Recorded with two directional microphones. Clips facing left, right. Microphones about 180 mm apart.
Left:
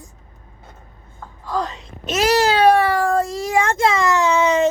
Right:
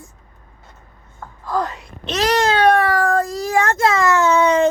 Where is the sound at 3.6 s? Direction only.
25° left (ahead or behind).